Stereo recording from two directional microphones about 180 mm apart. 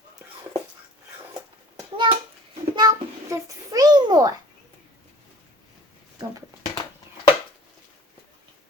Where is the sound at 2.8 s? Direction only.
20° right (ahead or behind).